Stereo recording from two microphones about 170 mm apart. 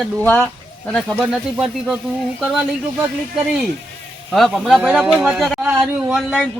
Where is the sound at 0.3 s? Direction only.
5° left (ahead or behind).